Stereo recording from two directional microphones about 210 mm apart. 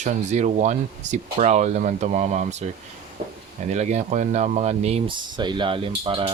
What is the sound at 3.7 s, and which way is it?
Speech, 35° right (ahead or behind).